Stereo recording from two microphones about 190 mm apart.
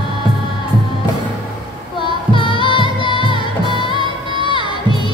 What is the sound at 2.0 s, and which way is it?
Music, 25° left (ahead or behind).